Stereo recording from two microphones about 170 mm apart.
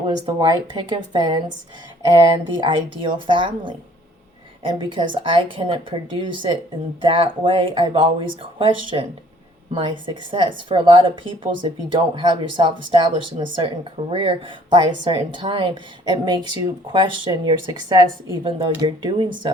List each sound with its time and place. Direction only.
0.3 s a woman's voice: 25° right (ahead or behind)